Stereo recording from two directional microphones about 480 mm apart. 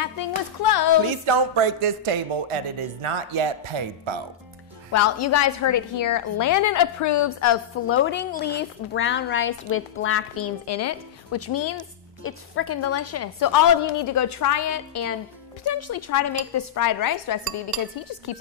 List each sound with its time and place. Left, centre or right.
0.0 s music: left
1.0 s speech: right
4.9 s a woman's voice: left